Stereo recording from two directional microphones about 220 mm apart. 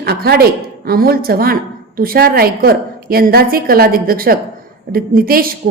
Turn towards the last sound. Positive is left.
turn(degrees=-40)  # may be behind; listen again after turning